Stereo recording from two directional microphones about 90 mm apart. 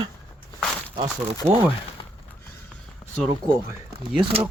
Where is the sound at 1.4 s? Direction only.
25° right (ahead or behind).